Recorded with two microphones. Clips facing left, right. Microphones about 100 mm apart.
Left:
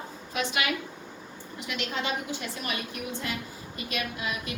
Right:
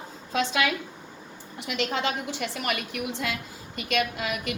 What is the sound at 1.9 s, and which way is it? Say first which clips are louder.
A woman's voice: right 3 dB; 80° right.